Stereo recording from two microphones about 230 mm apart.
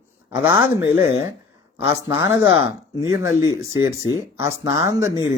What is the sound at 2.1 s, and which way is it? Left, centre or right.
Speech, left.